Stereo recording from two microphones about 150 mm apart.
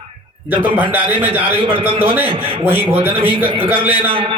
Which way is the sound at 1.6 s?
35° right (ahead or behind).